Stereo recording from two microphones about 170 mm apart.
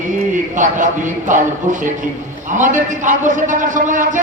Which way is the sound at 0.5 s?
45° right (ahead or behind).